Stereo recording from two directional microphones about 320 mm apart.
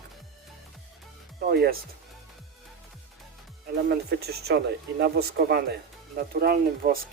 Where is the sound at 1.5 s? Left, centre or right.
Right.